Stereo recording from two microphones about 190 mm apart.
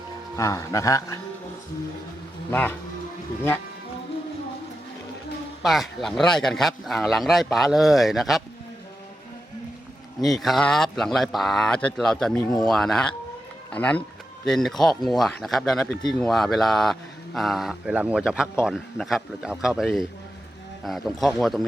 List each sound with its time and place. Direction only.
0.3 s speech: 15° left (ahead or behind)
2.5 s speech: 10° left (ahead or behind)
5.6 s speech: centre (ahead or behind)
10.2 s speech: centre (ahead or behind)